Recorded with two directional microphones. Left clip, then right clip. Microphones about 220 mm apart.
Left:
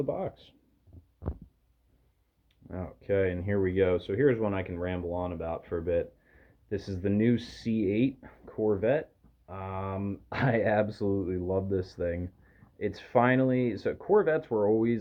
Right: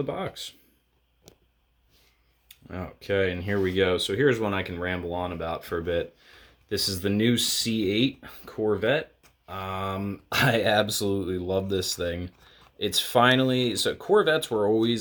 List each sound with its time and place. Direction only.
0.0 s speech: 35° right (ahead or behind)
2.5 s speech: 35° right (ahead or behind)